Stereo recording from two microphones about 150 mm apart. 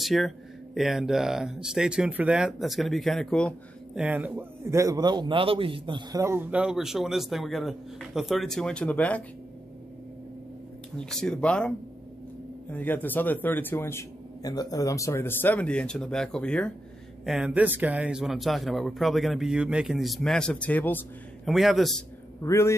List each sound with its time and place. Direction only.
0.0 s a man's voice: centre (ahead or behind)
3.9 s a man's voice: 10° right (ahead or behind); by 6.2 s 30° right (ahead or behind)
6.2 s a man's voice: 15° right (ahead or behind); by 9.2 s 10° left (ahead or behind)
11.0 s a man's voice: 5° left (ahead or behind)
12.7 s speech: 10° left (ahead or behind)
17.3 s a man's voice: 5° right (ahead or behind); by 21.0 s 10° left (ahead or behind)
21.5 s a man's voice: centre (ahead or behind)
22.4 s speech: 20° left (ahead or behind)